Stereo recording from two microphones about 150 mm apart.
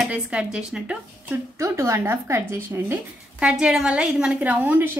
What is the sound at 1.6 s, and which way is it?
Speech, 20° right (ahead or behind).